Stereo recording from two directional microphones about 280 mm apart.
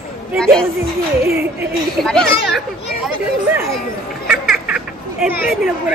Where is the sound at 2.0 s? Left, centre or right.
Centre.